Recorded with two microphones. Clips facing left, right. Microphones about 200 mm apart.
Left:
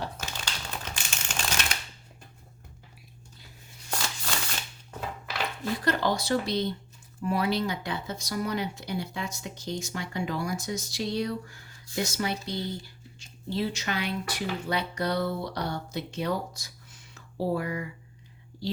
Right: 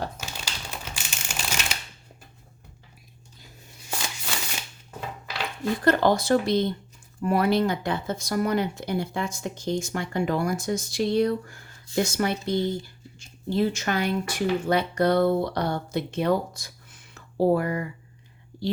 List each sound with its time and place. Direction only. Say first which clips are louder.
0.3 s typewriter: even; 10° right (ahead or behind)
3.9 s a sound: even; 10° right (ahead or behind)
5.8 s speech: right 7 dB; 50° right (ahead or behind)